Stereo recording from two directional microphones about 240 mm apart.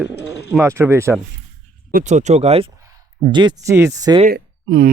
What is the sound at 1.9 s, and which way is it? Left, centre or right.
Speech, right.